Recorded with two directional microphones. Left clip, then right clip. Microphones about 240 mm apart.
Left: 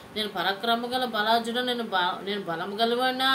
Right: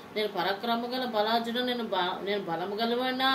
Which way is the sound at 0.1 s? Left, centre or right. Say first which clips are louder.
Left 1 dB; centre.